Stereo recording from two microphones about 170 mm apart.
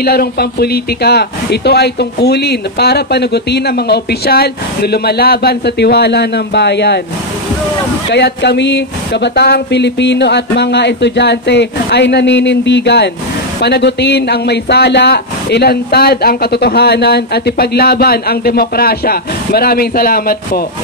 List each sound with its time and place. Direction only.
0.0 s speech: 65° left (ahead or behind)
8.1 s speech: 80° left; by 20.6 s 60° left (ahead or behind)